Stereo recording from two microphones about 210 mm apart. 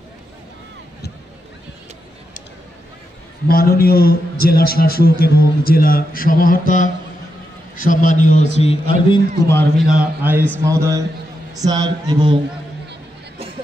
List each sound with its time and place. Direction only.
3.4 s a man's voice: 45° left (ahead or behind); by 9.2 s 25° left (ahead or behind)
9.8 s a man's voice: 5° right (ahead or behind); by 12.4 s 20° right (ahead or behind)